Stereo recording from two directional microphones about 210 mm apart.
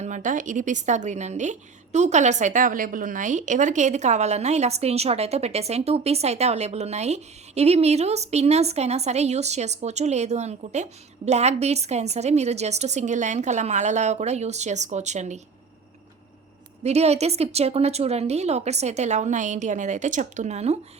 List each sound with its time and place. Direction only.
0.0 s a woman's voice: 35° right (ahead or behind)
16.8 s a woman's voice: 30° right (ahead or behind)